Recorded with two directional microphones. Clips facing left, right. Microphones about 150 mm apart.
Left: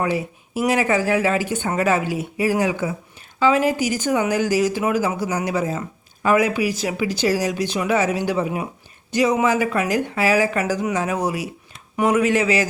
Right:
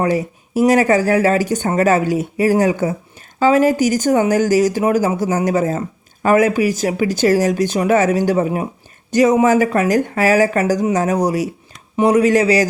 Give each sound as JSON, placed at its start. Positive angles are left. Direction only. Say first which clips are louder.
{"t": 0.0, "sound": "speech", "louder": "right 5 dB", "side_deg": -40}